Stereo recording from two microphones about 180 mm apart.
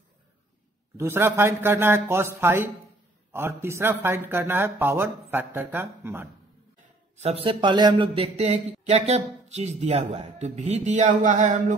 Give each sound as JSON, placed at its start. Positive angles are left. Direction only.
{"t": 0.9, "sound": "speech", "side_deg": -15}
{"t": 7.2, "sound": "speech", "side_deg": -35}